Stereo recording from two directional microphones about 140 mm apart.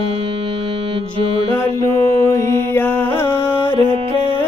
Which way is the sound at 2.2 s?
20° left (ahead or behind).